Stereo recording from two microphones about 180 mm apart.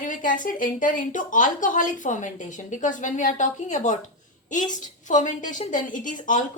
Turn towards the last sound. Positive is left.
turn(degrees=45)  # may be behind; listen again after turning